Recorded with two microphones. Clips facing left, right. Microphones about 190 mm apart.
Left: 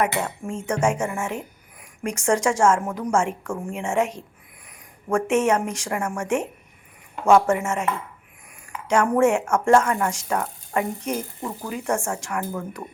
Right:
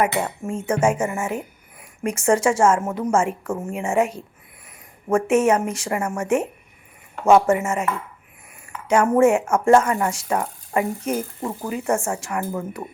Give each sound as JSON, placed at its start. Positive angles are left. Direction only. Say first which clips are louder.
{"t": 0.0, "sound": "a woman's voice", "louder": "right 2 dB", "side_deg": -10}